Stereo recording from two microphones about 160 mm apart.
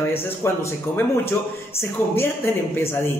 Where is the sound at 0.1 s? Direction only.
15° left (ahead or behind).